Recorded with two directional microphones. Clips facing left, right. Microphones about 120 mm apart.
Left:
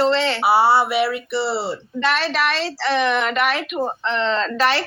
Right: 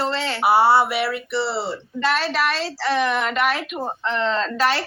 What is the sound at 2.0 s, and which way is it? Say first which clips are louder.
A woman's voice: left 1 dB; 85° left.